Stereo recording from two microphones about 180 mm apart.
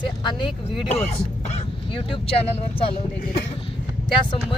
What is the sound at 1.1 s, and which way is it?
Throat clearing, 30° left (ahead or behind).